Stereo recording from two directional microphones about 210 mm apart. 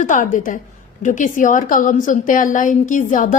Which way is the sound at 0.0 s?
40° left (ahead or behind).